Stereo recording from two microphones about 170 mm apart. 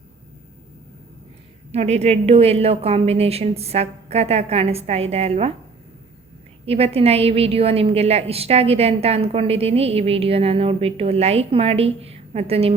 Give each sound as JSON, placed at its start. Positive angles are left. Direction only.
{"t": 1.7, "sound": "a woman's voice", "side_deg": -40}
{"t": 6.7, "sound": "a woman's voice", "side_deg": -35}